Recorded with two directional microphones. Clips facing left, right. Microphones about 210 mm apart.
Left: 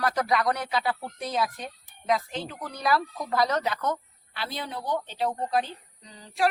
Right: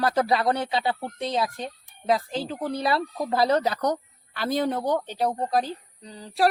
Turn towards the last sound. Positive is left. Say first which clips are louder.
# right 3 dB
turn(degrees=-35)  # may be behind; listen again after turning